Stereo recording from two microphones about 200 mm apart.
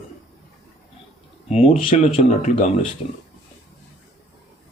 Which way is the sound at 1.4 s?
30° left (ahead or behind).